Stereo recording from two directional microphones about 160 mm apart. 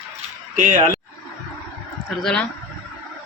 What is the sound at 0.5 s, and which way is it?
Speech, 55° right (ahead or behind).